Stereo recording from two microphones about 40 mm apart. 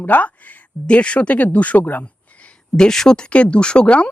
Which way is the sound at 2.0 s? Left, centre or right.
Left.